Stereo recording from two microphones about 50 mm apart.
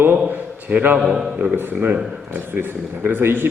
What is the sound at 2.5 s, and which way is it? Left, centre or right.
Speech, right.